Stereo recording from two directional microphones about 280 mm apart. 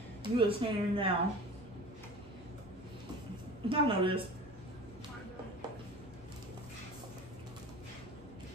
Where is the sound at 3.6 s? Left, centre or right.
Centre.